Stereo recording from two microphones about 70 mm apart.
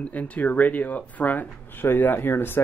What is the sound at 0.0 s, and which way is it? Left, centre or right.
Speech, left.